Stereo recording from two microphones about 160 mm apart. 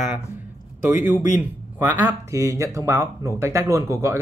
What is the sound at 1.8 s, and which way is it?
Speech, 10° right (ahead or behind).